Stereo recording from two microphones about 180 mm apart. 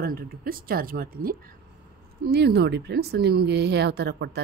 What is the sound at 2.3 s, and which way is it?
A woman's voice, 65° right (ahead or behind).